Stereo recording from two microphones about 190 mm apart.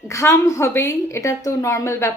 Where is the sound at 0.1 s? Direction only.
15° left (ahead or behind).